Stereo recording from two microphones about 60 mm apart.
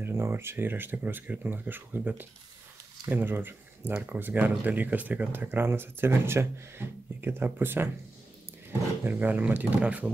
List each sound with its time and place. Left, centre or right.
0.0 s speech: right
9.0 s speech: right